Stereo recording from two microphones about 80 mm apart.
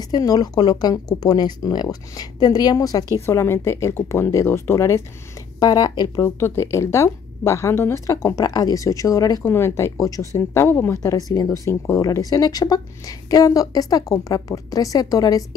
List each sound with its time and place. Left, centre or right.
0.0 s speech: left
3.2 s speech: left
5.6 s speech: left
6.2 s speech: left
8.5 s a woman's voice: left
9.4 s speech: left
9.9 s speech: left
11.0 s a woman's voice: left